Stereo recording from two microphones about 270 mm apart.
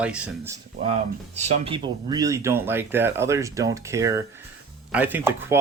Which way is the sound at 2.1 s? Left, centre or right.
Centre.